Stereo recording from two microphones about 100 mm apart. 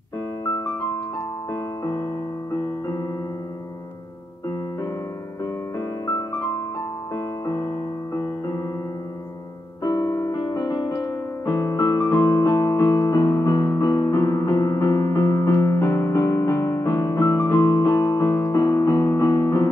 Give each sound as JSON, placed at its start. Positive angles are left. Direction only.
{"t": 0.5, "sound": "piano", "side_deg": 35}
{"t": 5.4, "sound": "piano", "side_deg": 35}
{"t": 7.2, "sound": "music", "side_deg": 40}
{"t": 9.8, "sound": "music", "side_deg": 35}
{"t": 10.4, "sound": "music", "side_deg": 45}